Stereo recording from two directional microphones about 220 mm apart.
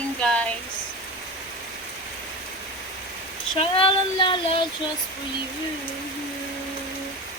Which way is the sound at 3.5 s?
25° left (ahead or behind).